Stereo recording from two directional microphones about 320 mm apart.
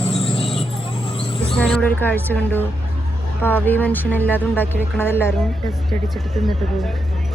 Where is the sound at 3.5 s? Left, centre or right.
Centre.